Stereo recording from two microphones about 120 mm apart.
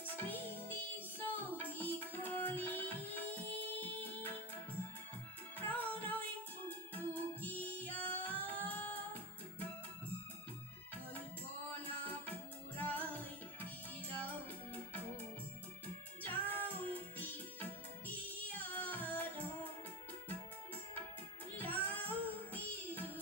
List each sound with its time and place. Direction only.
0.0 s music: 15° left (ahead or behind)
5.5 s music: 15° left (ahead or behind)
11.9 s music: 15° left (ahead or behind)
16.2 s music: 15° left (ahead or behind)
21.6 s music: 15° left (ahead or behind)